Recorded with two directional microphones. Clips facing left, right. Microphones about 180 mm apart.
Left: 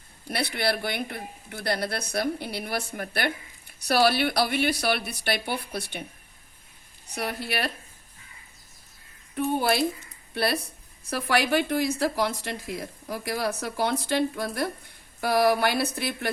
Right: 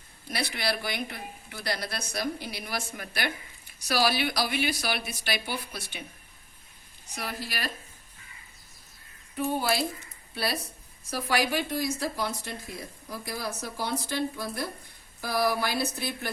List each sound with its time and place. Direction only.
0.3 s speech: 60° left (ahead or behind)
7.2 s speech: 60° left (ahead or behind)
9.6 s speech: 60° left (ahead or behind)